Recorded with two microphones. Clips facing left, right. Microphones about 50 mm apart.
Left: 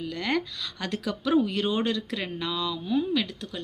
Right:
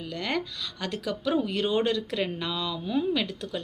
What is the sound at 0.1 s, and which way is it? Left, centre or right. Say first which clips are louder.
Speech: left 1 dB; centre.